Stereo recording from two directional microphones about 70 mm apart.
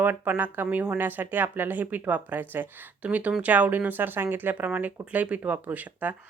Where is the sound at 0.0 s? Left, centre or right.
Right.